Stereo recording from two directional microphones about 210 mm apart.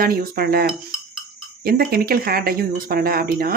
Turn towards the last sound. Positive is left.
turn(degrees=-45)  # may be behind; listen again after turning